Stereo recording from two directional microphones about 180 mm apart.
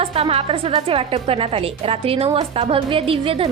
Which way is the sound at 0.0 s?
30° right (ahead or behind).